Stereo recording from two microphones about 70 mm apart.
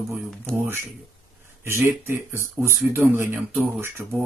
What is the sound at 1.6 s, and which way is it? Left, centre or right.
Speech, right.